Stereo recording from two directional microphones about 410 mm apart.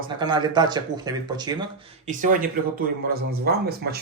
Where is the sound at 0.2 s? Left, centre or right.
Centre.